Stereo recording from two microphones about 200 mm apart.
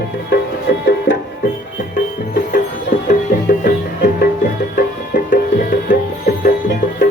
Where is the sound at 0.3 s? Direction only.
60° left (ahead or behind).